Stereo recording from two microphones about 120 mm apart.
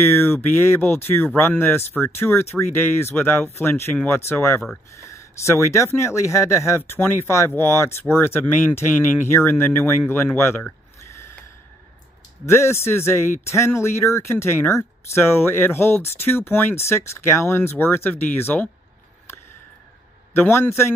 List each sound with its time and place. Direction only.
0.0 s speech: 20° left (ahead or behind)
12.4 s speech: 20° left (ahead or behind)
20.3 s speech: 20° left (ahead or behind)